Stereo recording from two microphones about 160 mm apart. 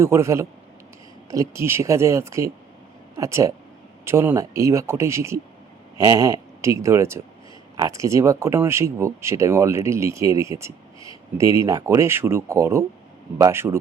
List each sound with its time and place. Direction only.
0.0 s speech: 15° right (ahead or behind)